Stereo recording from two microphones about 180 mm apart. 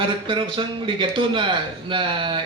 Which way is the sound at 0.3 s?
30° right (ahead or behind).